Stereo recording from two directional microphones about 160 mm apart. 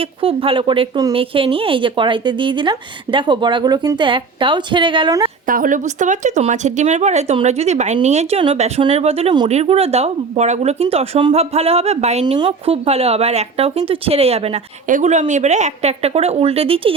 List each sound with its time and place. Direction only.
0.0 s speech: 35° right (ahead or behind)
5.5 s speech: 55° right (ahead or behind)
12.2 s speech: 30° right (ahead or behind)
14.8 s speech: 50° right (ahead or behind)